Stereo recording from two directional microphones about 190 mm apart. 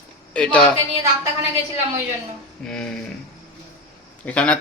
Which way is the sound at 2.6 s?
5° left (ahead or behind).